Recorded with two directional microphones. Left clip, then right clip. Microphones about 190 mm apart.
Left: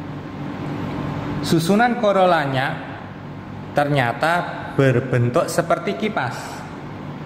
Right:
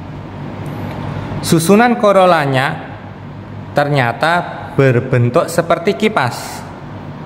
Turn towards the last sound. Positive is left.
turn(degrees=-35)  # may be behind; listen again after turning